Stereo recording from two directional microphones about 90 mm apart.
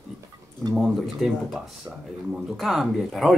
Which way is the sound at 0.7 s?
5° right (ahead or behind).